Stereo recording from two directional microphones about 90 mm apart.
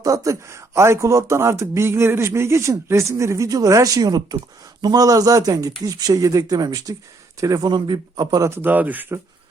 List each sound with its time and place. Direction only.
0.0 s speech: 35° right (ahead or behind)
7.7 s a man's voice: 55° right (ahead or behind)
8.4 s speech: 25° right (ahead or behind)